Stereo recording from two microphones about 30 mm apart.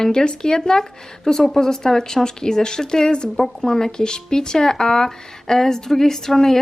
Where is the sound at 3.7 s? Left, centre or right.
Centre.